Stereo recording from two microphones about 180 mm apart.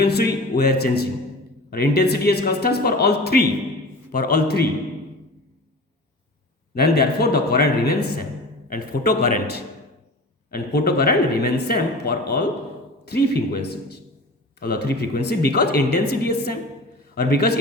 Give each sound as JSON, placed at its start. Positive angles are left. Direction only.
{"t": 0.0, "sound": "speech", "side_deg": 60}
{"t": 6.7, "sound": "speech", "side_deg": 60}